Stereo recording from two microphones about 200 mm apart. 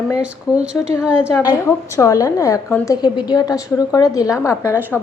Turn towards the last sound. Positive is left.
turn(degrees=15)  # may be behind; listen again after turning